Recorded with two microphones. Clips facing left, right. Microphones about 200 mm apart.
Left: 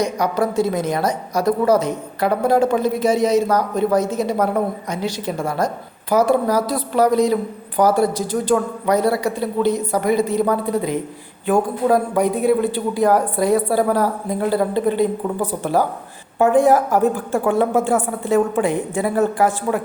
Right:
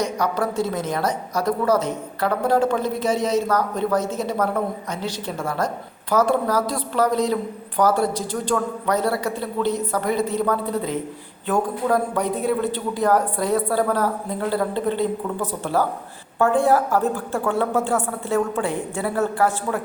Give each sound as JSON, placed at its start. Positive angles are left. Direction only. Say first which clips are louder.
{"t": 0.0, "sound": "a woman's voice", "louder": "left 3 dB", "side_deg": 10}